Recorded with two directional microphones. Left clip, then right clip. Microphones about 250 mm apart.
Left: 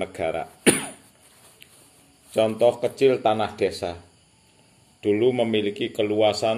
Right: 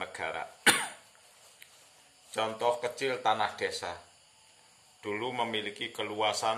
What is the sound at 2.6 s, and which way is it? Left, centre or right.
Speech, right.